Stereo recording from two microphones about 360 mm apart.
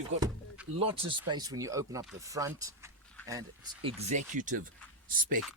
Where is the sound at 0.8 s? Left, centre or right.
Centre.